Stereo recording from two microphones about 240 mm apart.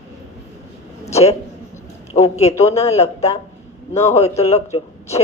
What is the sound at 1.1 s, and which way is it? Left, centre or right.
Speech, left.